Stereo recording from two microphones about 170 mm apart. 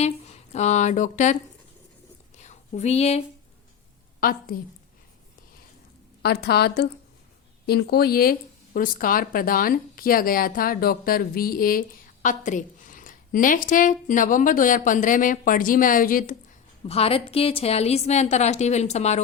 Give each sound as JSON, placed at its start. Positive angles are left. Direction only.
{"t": 0.0, "sound": "speech", "side_deg": 40}
{"t": 2.3, "sound": "a sound", "side_deg": 45}
{"t": 4.2, "sound": "speech", "side_deg": 60}
{"t": 6.2, "sound": "a woman's voice", "side_deg": 70}
{"t": 16.9, "sound": "a woman's voice", "side_deg": 35}